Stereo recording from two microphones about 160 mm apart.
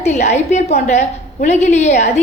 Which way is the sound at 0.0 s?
45° left (ahead or behind).